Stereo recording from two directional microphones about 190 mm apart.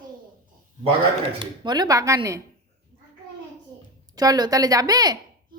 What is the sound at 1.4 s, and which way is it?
A woman's voice, 20° right (ahead or behind).